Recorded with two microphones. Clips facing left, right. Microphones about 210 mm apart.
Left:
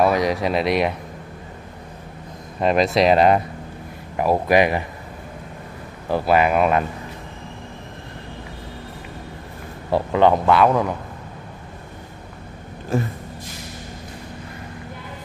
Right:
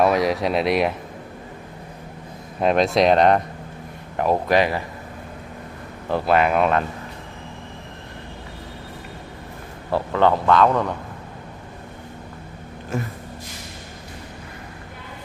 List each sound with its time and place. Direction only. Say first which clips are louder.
0.0 s speech: even; centre (ahead or behind)
2.6 s a man's voice: even; centre (ahead or behind)
6.0 s speech: left 1 dB; 5° left (ahead or behind)
9.8 s a man's voice: left 2 dB; 15° left (ahead or behind)
12.9 s a sound: left 5 dB; 35° left (ahead or behind)